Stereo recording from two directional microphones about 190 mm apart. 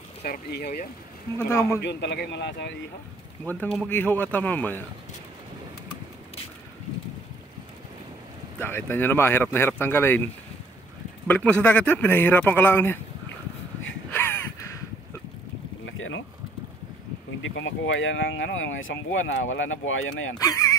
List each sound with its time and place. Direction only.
0.2 s speech: 55° left (ahead or behind)
1.5 s speech: 15° left (ahead or behind)
1.8 s speech: 65° left (ahead or behind)
3.4 s speech: 5° left (ahead or behind)
8.5 s speech: 10° left (ahead or behind)
11.2 s speech: 10° left (ahead or behind)
14.1 s crow: 10° left (ahead or behind)
15.8 s boat: 80° left
17.4 s speech: 85° left
20.3 s speech: 15° left (ahead or behind)